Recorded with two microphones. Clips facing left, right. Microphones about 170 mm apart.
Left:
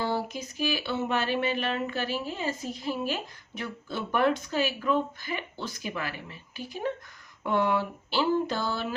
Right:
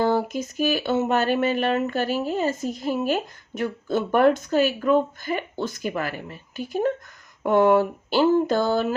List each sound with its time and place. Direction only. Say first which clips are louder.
0.0 s speech: right 8 dB; 50° right (ahead or behind)